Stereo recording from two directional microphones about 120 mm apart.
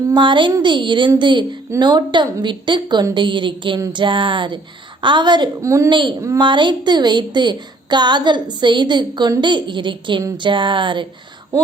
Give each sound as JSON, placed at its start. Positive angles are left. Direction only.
{"t": 0.1, "sound": "a sound", "side_deg": -40}
{"t": 0.6, "sound": "a woman's voice", "side_deg": -40}
{"t": 5.6, "sound": "a woman's voice", "side_deg": -25}
{"t": 5.9, "sound": "a woman's voice", "side_deg": -40}
{"t": 6.1, "sound": "a woman's voice", "side_deg": -25}
{"t": 6.4, "sound": "a woman's voice", "side_deg": -40}
{"t": 10.3, "sound": "a sound", "side_deg": -40}